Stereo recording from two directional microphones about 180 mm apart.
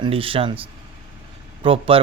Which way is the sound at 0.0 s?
30° right (ahead or behind).